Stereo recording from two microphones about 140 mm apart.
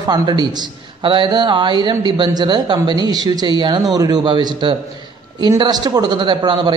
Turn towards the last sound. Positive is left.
turn(degrees=-35)  # may be behind; listen again after turning